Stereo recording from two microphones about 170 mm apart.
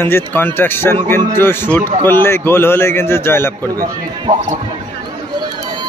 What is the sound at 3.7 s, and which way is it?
Speech, 20° right (ahead or behind).